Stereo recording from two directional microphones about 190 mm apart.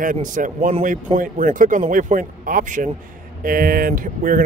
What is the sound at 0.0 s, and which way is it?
Speech, 45° right (ahead or behind).